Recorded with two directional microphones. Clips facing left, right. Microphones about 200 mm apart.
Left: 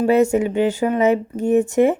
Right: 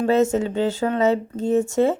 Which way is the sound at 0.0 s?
15° left (ahead or behind).